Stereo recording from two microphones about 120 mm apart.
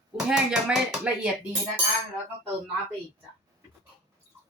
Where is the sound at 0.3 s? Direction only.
5° right (ahead or behind).